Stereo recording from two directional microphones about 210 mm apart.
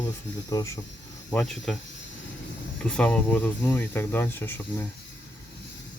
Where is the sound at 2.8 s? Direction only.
5° left (ahead or behind).